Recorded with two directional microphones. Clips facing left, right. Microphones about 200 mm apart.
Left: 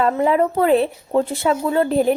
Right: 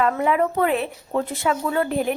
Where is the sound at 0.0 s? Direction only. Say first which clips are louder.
Left 3 dB; 30° left (ahead or behind).